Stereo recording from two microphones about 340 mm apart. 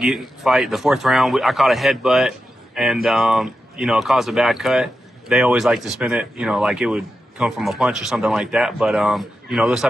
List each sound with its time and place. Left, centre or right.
0.0 s speech: centre